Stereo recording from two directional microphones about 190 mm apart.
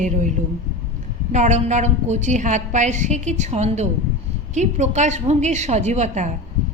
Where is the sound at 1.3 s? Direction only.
40° right (ahead or behind).